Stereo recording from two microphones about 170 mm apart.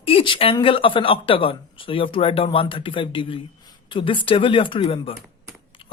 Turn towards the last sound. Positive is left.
turn(degrees=30)  # may be behind; listen again after turning